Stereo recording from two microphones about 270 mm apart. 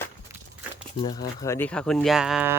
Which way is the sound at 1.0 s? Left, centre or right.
Centre.